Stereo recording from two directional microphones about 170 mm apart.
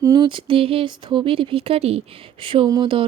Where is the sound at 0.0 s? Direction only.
25° right (ahead or behind).